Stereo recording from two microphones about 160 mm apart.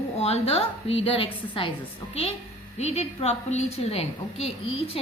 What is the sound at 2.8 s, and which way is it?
A woman's voice, 40° left (ahead or behind).